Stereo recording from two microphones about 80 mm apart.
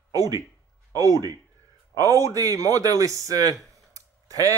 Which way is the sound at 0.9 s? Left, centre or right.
Right.